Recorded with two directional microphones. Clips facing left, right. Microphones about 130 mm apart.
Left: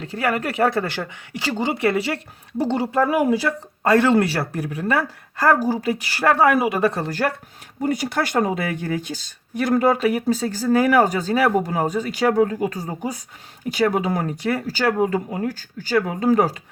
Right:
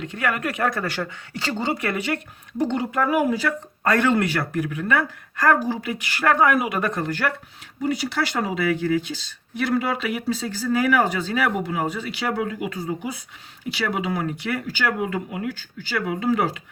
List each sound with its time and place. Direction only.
0.0 s speech: 35° left (ahead or behind)